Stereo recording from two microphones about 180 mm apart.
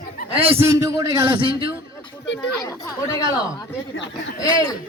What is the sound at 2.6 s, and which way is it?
Speech, 20° left (ahead or behind).